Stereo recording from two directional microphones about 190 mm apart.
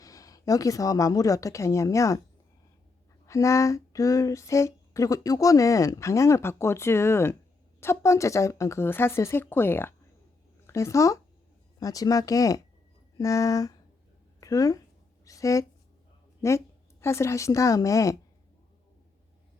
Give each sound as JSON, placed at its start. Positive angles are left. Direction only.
{"t": 0.0, "sound": "speech", "side_deg": 20}
{"t": 3.2, "sound": "a woman's voice", "side_deg": 15}